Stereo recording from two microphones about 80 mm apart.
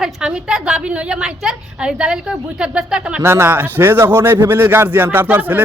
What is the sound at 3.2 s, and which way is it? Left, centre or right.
A man's voice, right.